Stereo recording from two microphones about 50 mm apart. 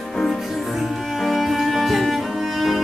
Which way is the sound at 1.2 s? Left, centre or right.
Centre.